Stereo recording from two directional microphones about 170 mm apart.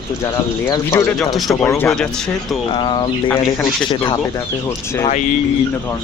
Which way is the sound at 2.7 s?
25° left (ahead or behind).